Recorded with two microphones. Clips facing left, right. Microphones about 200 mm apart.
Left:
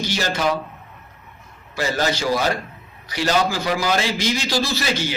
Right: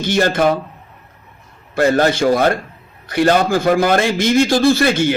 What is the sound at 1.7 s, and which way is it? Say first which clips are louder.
A man's voice: right 8 dB; 55° right (ahead or behind).